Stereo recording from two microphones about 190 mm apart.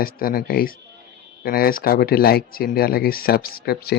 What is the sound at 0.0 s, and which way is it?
Speech, 50° left (ahead or behind).